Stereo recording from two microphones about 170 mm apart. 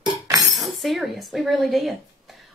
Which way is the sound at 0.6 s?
Centre (ahead or behind).